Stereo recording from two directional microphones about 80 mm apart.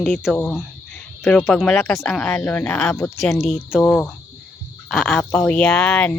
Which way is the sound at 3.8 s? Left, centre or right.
Left.